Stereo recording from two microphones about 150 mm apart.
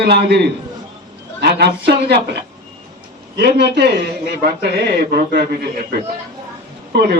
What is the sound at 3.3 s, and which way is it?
A man's voice, 90° right.